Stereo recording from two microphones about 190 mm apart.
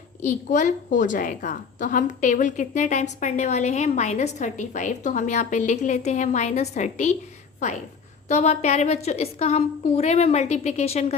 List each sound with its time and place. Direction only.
0.3 s a woman's voice: 40° left (ahead or behind)
8.3 s a woman's voice: 35° left (ahead or behind)